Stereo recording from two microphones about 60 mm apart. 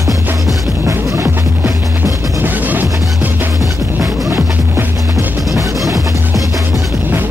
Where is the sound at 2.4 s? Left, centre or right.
Right.